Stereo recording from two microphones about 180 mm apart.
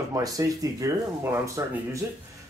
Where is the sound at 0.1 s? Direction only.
20° right (ahead or behind).